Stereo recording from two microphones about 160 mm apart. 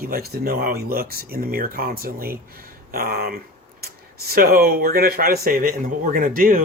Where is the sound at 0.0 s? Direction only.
70° right (ahead or behind).